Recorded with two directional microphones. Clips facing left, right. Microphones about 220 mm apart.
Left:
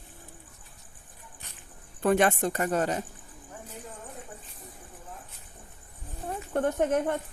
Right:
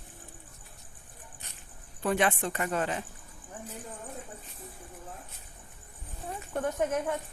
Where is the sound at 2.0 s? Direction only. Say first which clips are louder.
Left 4 dB; 45° left (ahead or behind).